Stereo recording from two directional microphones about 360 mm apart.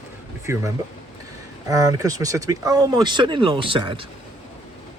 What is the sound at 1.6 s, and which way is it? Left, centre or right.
Speech, centre.